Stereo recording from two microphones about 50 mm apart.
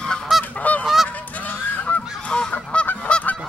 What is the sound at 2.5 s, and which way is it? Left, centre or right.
Goose, left.